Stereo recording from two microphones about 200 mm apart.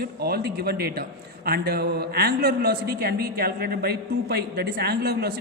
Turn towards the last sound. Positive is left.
turn(degrees=-55)  # may be behind; listen again after turning